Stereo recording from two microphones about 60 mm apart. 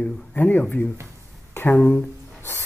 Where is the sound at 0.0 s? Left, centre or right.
Left.